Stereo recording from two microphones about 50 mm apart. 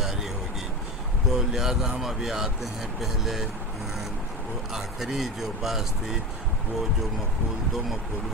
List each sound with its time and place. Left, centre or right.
0.0 s vehicle: centre
1.3 s speech: centre
4.7 s speech: centre